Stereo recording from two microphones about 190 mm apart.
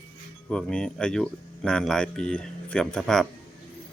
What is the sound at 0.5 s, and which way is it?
Speech, 5° left (ahead or behind).